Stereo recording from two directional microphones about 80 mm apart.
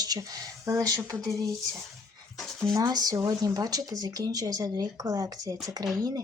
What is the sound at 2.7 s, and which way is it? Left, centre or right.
Speech, right.